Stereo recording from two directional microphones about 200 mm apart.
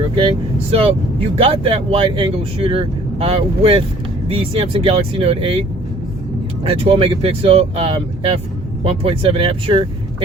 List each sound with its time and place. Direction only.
0.2 s speech: 25° right (ahead or behind)
6.7 s speech: 30° right (ahead or behind)